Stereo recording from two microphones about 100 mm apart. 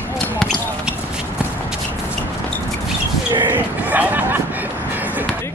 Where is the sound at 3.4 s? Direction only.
15° right (ahead or behind).